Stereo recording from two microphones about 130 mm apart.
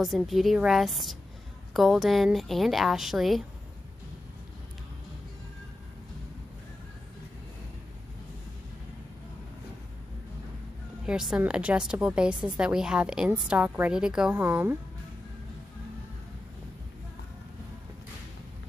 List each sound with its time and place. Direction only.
0.0 s a woman's voice: centre (ahead or behind)
11.1 s a woman's voice: 5° right (ahead or behind)